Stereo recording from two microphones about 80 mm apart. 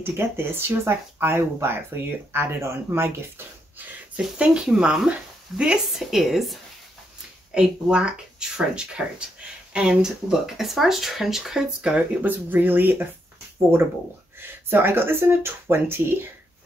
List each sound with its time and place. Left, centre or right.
0.0 s speech: right
4.2 s speech: centre
7.5 s speech: centre
12.2 s speech: right
14.4 s speech: right